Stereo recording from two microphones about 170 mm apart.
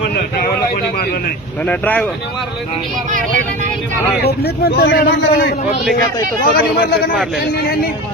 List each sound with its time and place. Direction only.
1.6 s speech: 10° left (ahead or behind)
4.2 s a man's voice: 65° left (ahead or behind)